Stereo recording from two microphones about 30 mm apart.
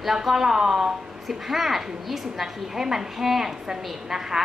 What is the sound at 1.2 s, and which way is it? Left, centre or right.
A woman's voice, centre.